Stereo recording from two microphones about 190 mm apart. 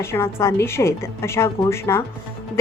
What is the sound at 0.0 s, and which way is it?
A woman's voice, 15° left (ahead or behind).